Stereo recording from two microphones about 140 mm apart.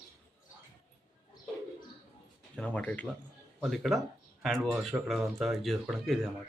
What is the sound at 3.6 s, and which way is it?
Speech, centre (ahead or behind).